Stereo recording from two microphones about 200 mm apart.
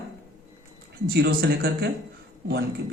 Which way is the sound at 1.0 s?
55° right (ahead or behind).